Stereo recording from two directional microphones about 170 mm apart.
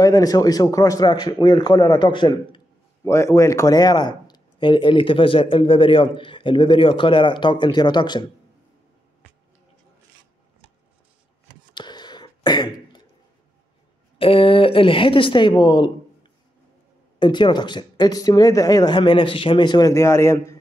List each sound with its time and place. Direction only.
0.0 s a man's voice: 20° left (ahead or behind)
11.7 s a sound: 25° left (ahead or behind)
14.1 s a woman's voice: 30° left (ahead or behind); by 20.5 s 15° left (ahead or behind)